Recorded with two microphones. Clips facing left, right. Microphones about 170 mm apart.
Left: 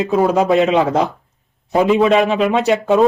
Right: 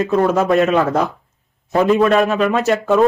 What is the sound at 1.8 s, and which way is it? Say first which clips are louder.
Speech: even; centre (ahead or behind).